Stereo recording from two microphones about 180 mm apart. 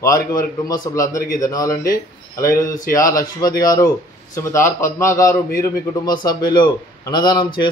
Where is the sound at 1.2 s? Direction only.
20° left (ahead or behind).